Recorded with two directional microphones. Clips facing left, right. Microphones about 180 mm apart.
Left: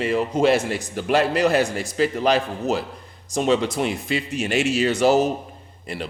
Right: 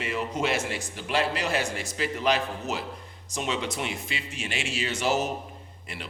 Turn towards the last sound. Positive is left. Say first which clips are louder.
# left 9 dB
turn(degrees=35)  # may be behind; listen again after turning